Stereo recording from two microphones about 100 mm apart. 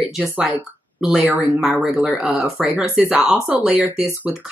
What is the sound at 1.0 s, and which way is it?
Speech, 15° right (ahead or behind).